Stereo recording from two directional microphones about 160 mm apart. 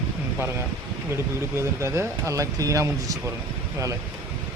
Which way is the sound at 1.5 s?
15° right (ahead or behind).